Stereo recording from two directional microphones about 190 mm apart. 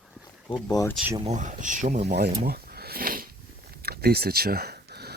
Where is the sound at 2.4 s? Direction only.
55° right (ahead or behind).